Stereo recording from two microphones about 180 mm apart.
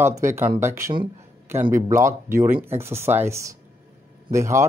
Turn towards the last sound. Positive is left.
turn(degrees=-15)  # may be behind; listen again after turning